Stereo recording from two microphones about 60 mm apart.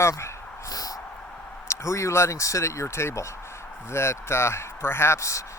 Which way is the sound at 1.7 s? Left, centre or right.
Left.